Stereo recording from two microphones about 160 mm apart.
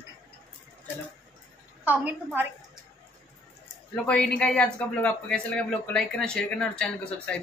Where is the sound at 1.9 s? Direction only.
10° right (ahead or behind).